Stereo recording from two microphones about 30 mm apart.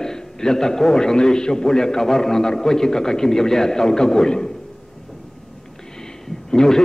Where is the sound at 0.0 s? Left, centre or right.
Centre.